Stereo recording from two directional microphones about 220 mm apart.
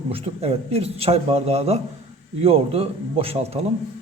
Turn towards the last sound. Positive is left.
turn(degrees=-25)  # may be behind; listen again after turning